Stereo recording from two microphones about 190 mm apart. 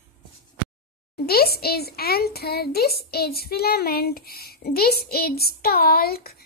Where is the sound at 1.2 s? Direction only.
55° left (ahead or behind).